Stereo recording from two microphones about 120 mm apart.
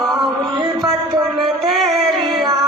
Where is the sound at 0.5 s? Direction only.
35° right (ahead or behind).